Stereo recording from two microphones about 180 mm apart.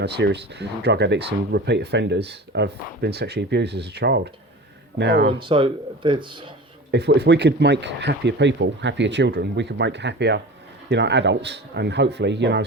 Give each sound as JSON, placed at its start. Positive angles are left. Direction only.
{"t": 0.0, "sound": "speech", "side_deg": -65}
{"t": 5.4, "sound": "speech", "side_deg": -30}
{"t": 6.9, "sound": "speech", "side_deg": -65}